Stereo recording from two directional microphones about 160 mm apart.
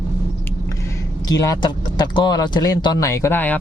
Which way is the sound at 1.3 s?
25° left (ahead or behind).